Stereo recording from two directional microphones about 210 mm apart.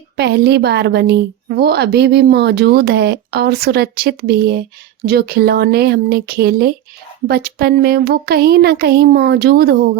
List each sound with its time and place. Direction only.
0.2 s a woman's voice: 50° right (ahead or behind)